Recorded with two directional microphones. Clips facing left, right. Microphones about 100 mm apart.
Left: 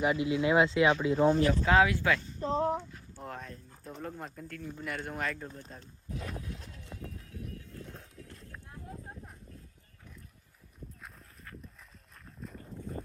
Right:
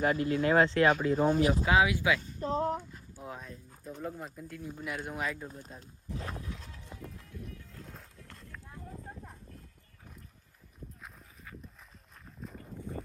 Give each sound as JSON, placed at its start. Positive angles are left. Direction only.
{"t": 0.1, "sound": "speech", "side_deg": -45}
{"t": 0.4, "sound": "speech", "side_deg": 15}
{"t": 0.7, "sound": "speech", "side_deg": -45}
{"t": 1.1, "sound": "speech", "side_deg": -10}
{"t": 11.0, "sound": "dog", "side_deg": 0}
{"t": 12.2, "sound": "a sound", "side_deg": 0}